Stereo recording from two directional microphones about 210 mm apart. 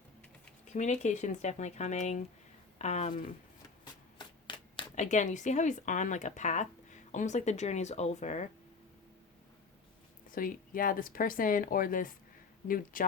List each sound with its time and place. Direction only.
0.7 s speech: 35° left (ahead or behind)
4.2 s shuffling cards: 25° left (ahead or behind)
4.9 s speech: 35° left (ahead or behind)
10.3 s speech: 40° left (ahead or behind)